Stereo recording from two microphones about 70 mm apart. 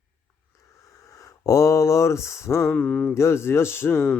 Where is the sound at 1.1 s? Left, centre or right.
Left.